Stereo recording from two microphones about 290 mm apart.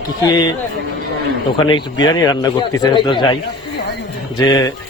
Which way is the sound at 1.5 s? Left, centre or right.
Centre.